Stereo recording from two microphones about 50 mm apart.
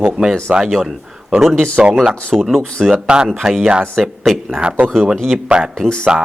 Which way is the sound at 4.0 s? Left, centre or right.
Centre.